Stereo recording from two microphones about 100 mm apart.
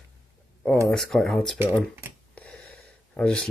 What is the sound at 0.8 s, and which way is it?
Speech, 5° left (ahead or behind).